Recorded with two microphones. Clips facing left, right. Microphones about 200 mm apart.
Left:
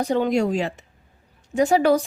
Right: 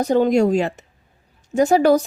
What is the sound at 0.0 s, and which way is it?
Speech, 40° right (ahead or behind).